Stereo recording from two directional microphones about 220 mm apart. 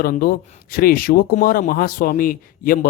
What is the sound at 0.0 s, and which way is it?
A man's voice, 40° left (ahead or behind).